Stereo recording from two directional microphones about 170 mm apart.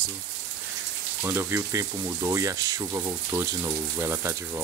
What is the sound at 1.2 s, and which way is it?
Speech, 15° right (ahead or behind).